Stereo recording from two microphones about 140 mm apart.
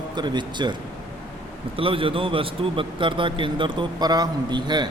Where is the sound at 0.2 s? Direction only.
30° right (ahead or behind).